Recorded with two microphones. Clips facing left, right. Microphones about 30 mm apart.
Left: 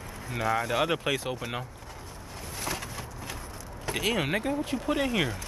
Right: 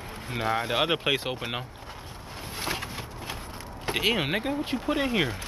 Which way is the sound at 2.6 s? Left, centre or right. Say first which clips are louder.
Right 2 dB; right.